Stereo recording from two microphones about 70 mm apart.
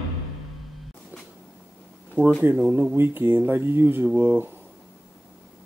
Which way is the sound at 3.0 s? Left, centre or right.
Right.